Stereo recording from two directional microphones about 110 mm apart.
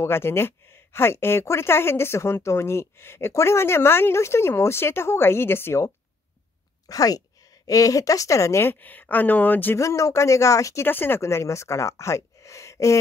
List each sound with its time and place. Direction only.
0.0 s a woman's voice: 20° left (ahead or behind)
6.9 s a woman's voice: 35° left (ahead or behind); by 9.8 s 15° left (ahead or behind)
9.8 s a woman's voice: 30° left (ahead or behind)